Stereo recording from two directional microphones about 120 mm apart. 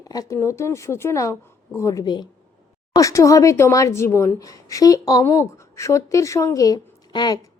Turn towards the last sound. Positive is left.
turn(degrees=35)  # may be behind; listen again after turning